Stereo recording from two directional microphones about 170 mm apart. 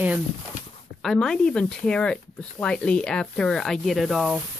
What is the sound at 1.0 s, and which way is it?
Speech, 5° left (ahead or behind).